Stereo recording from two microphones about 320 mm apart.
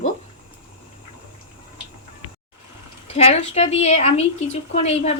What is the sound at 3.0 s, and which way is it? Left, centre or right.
A woman's voice, centre.